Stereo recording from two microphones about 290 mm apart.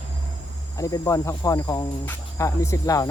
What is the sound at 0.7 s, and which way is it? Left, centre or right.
Speech, centre.